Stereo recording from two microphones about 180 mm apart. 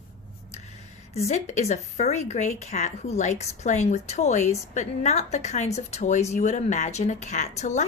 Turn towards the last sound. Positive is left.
turn(degrees=40)  # may be behind; listen again after turning